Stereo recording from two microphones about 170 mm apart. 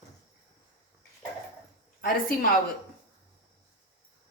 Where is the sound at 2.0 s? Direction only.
60° left (ahead or behind).